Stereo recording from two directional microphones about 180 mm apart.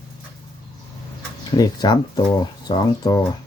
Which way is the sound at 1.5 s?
20° left (ahead or behind).